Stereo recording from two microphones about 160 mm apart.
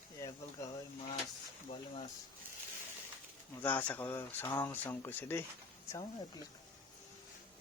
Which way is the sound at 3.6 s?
10° left (ahead or behind).